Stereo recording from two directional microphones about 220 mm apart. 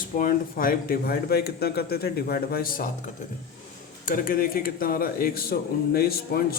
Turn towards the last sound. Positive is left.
turn(degrees=45)  # may be behind; listen again after turning